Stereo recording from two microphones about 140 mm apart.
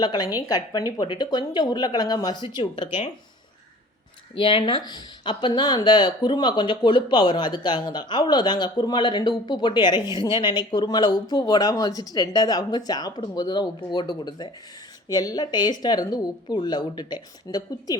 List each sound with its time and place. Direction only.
0.0 s speech: 30° left (ahead or behind)
4.4 s speech: 40° left (ahead or behind)